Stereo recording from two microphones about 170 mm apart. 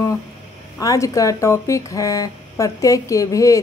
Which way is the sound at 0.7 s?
20° left (ahead or behind).